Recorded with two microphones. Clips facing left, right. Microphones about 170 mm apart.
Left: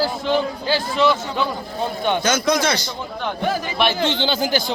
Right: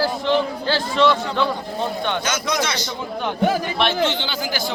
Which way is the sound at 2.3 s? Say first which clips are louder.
Left 4 dB; 35° left (ahead or behind).